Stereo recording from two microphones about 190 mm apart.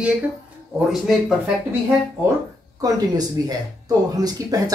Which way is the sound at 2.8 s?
20° right (ahead or behind).